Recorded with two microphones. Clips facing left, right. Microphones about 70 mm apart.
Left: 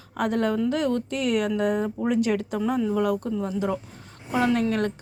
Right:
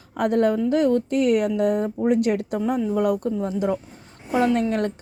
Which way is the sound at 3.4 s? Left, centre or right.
Right.